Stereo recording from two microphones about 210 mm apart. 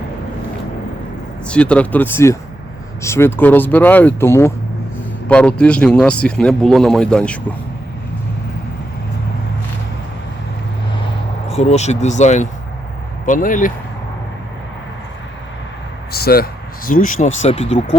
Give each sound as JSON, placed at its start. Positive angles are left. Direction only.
{"t": 1.5, "sound": "speech", "side_deg": 5}
{"t": 11.4, "sound": "speech", "side_deg": 30}
{"t": 16.1, "sound": "speech", "side_deg": 45}